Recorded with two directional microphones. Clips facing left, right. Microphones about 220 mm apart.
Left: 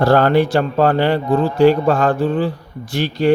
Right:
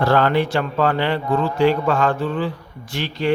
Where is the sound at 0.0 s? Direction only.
40° left (ahead or behind).